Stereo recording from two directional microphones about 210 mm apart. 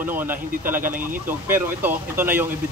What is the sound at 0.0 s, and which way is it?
Speech, 10° right (ahead or behind).